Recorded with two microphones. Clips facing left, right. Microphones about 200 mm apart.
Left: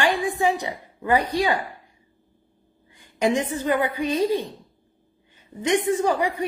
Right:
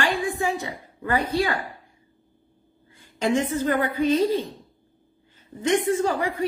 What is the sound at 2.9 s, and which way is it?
A woman's voice, 15° left (ahead or behind).